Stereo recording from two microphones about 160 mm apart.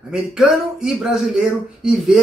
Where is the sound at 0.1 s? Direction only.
5° right (ahead or behind).